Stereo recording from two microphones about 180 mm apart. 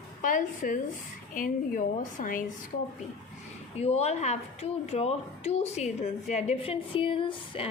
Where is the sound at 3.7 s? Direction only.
35° left (ahead or behind).